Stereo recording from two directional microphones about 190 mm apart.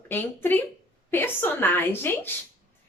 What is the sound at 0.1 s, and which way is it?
A woman's voice, 10° left (ahead or behind).